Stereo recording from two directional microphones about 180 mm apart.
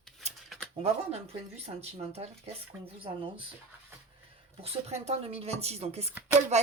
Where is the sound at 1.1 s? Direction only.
35° right (ahead or behind).